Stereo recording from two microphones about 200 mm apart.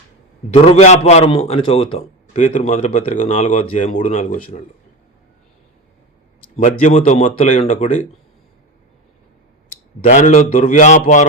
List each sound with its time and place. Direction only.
0.5 s a man's voice: 35° left (ahead or behind)
6.6 s speech: 35° left (ahead or behind)
10.0 s speech: 35° left (ahead or behind)